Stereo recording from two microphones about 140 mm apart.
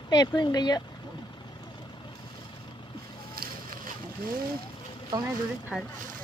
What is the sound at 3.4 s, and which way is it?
Boat, 90° right.